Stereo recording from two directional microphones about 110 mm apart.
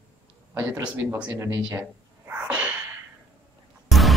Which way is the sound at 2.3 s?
10° right (ahead or behind).